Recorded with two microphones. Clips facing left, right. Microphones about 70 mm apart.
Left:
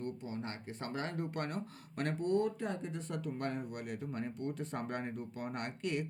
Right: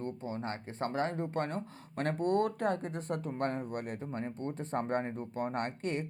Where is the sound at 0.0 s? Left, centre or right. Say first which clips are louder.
Right 3 dB; right.